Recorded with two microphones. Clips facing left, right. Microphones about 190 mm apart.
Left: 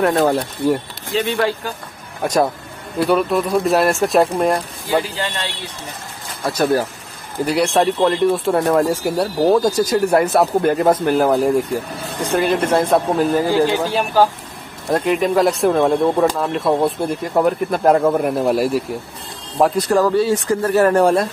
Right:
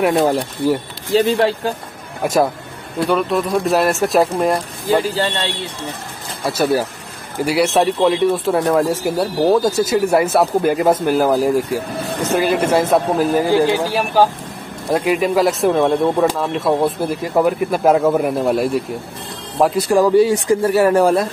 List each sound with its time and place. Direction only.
0.1 s speech: 5° right (ahead or behind)
1.1 s speech: 30° right (ahead or behind)
2.2 s speech: 5° right (ahead or behind)
5.1 s speech: 30° right (ahead or behind)
6.4 s speech: 10° right (ahead or behind)
13.4 s speech: 15° right (ahead or behind); by 18.9 s centre (ahead or behind)
19.6 s speech: 10° right (ahead or behind)